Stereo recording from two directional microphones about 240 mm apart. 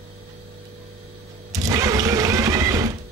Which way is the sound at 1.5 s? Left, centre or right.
Centre.